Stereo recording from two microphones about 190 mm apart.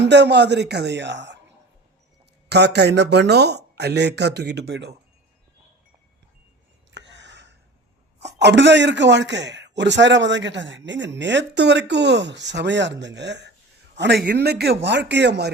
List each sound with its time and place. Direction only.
0.1 s a man's voice: 65° right (ahead or behind)
6.9 s a sound: 65° right (ahead or behind)
8.3 s a man's voice: 65° right (ahead or behind)